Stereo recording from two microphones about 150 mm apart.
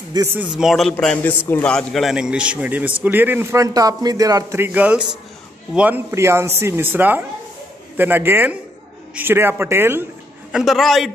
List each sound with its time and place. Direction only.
0.1 s a man's voice: 20° right (ahead or behind)
0.5 s a man's voice: centre (ahead or behind)
10.5 s a man's voice: centre (ahead or behind)